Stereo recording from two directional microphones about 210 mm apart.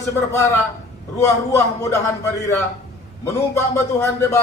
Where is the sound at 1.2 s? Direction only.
15° left (ahead or behind).